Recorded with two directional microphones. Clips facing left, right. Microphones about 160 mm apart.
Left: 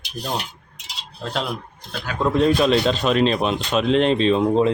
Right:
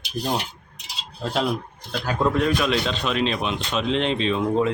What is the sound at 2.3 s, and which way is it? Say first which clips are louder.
A man's voice: left 5 dB; 30° left (ahead or behind).